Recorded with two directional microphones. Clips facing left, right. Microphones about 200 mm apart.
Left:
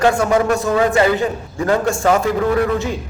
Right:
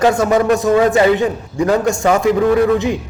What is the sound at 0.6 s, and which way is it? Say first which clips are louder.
A man's voice: right 3 dB; 20° right (ahead or behind).